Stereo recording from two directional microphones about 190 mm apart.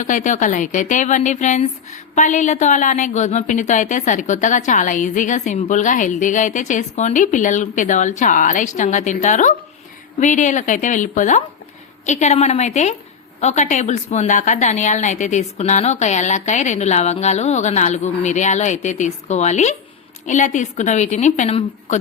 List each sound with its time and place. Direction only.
0.0 s speech: 40° left (ahead or behind)